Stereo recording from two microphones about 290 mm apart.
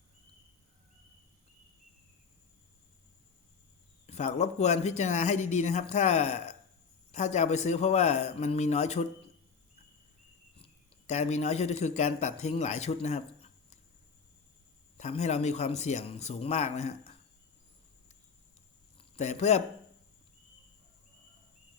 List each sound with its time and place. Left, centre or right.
4.0 s speech: left
10.6 s speech: left
14.9 s speech: left
18.9 s speech: left